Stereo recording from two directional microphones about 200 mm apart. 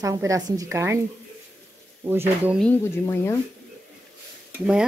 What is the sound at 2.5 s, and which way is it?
Speech, 5° left (ahead or behind).